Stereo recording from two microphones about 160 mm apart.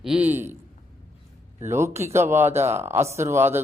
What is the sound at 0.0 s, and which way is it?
Speech, 10° right (ahead or behind).